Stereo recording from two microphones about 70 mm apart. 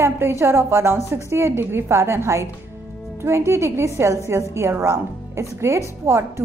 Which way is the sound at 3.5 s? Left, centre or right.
Right.